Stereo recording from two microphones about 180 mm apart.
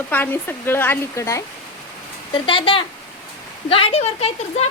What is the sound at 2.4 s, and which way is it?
A woman's voice, 30° left (ahead or behind).